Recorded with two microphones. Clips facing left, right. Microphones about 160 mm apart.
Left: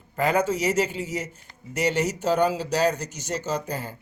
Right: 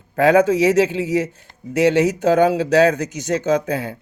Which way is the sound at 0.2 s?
75° right (ahead or behind).